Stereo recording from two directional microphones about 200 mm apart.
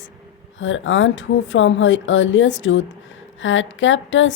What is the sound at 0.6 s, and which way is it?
A woman's voice, 70° left (ahead or behind).